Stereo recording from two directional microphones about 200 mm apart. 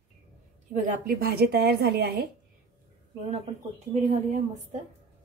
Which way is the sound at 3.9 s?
35° right (ahead or behind).